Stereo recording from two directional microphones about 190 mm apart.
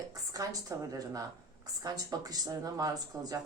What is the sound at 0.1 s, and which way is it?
A woman's voice, 20° right (ahead or behind).